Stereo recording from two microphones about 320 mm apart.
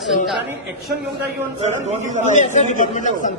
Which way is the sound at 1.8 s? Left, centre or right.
Right.